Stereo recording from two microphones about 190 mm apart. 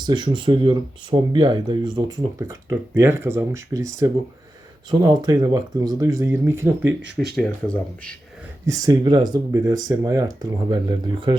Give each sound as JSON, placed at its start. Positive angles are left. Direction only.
{"t": 0.0, "sound": "speech", "side_deg": -25}
{"t": 7.3, "sound": "speech", "side_deg": 5}
{"t": 8.6, "sound": "speech", "side_deg": -15}